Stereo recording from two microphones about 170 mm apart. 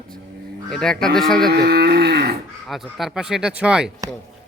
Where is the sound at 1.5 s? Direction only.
70° right (ahead or behind).